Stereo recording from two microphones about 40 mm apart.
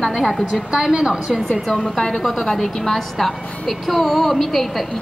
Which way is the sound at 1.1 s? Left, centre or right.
Centre.